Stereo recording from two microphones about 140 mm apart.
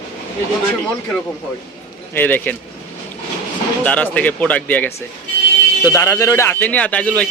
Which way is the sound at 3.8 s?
10° left (ahead or behind).